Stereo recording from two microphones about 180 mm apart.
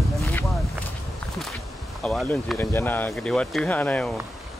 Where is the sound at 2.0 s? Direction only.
5° left (ahead or behind).